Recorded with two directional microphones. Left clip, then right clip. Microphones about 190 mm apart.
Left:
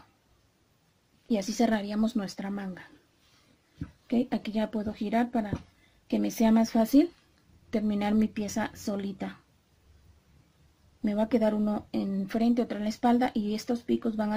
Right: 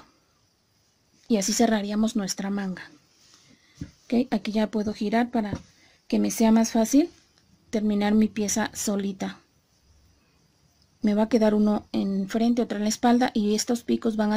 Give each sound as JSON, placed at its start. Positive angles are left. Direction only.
{"t": 1.3, "sound": "speech", "side_deg": -30}
{"t": 4.1, "sound": "speech", "side_deg": -25}
{"t": 11.0, "sound": "speech", "side_deg": -30}